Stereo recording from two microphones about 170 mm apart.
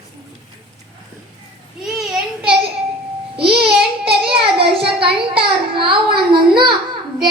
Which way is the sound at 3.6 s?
30° right (ahead or behind).